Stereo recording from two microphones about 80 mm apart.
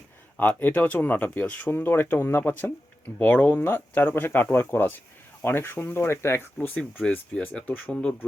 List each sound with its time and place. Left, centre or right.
0.3 s speech: centre